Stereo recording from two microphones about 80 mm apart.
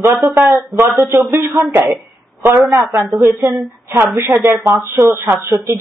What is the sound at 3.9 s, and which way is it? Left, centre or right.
Speech, right.